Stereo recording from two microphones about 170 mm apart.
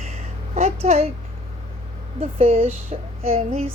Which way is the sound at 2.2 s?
35° right (ahead or behind).